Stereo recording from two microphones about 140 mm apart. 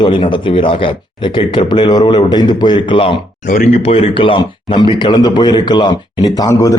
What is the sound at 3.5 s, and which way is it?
Speech, 65° left (ahead or behind).